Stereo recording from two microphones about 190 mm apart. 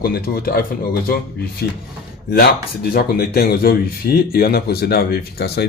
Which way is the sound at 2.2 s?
60° left (ahead or behind).